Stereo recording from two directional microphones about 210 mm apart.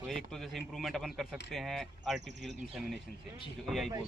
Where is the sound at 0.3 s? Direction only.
Centre (ahead or behind).